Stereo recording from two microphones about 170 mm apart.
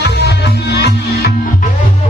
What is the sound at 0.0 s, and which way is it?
Music, 75° left (ahead or behind).